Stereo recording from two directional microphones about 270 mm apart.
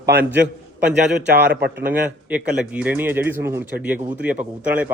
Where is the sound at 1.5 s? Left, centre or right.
Right.